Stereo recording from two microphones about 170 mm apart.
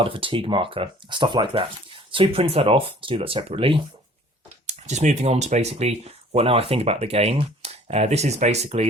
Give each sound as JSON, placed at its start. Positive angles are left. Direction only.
{"t": 0.0, "sound": "speech", "side_deg": -30}